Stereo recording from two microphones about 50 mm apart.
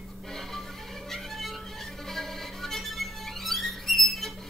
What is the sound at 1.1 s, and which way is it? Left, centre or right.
Music, centre.